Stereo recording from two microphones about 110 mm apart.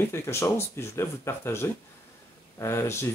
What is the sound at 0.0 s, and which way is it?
Speech, 25° left (ahead or behind).